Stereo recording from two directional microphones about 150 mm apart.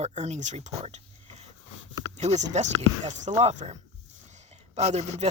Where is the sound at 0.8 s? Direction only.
45° right (ahead or behind).